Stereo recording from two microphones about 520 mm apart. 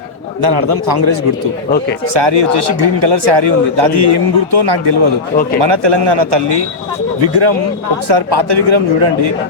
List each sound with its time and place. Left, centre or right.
0.4 s a man's voice: right